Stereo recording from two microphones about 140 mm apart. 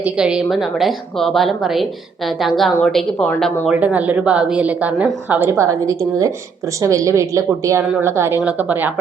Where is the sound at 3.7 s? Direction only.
10° right (ahead or behind).